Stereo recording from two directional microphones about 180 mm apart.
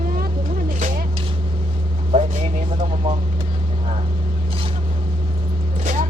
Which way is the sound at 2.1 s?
35° right (ahead or behind).